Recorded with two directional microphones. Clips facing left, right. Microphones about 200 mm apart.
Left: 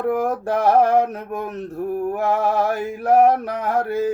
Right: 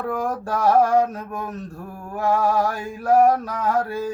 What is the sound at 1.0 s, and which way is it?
Mantra, 20° left (ahead or behind).